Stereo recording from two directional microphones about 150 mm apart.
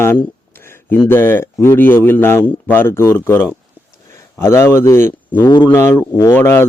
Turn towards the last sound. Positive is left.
turn(degrees=15)  # may be behind; listen again after turning